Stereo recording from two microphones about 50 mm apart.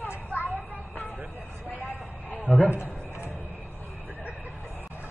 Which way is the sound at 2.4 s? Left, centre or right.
Left.